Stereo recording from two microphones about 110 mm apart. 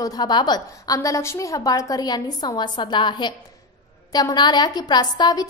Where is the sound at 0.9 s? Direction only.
25° left (ahead or behind).